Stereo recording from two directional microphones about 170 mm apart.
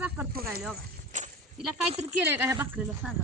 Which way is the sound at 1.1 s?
45° right (ahead or behind).